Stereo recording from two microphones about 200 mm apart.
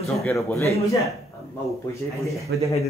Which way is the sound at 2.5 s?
65° right (ahead or behind).